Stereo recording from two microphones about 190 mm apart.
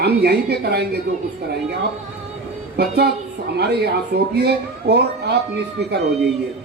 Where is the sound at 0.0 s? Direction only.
60° right (ahead or behind).